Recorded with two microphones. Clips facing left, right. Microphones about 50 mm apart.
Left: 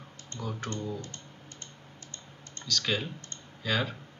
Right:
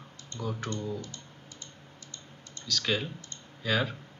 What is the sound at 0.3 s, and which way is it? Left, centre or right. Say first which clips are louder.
Speech: right 2 dB; left.